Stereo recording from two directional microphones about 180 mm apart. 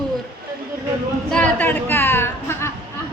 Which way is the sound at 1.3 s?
10° left (ahead or behind).